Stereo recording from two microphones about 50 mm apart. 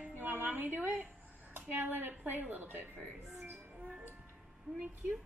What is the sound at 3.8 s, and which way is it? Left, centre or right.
Music, right.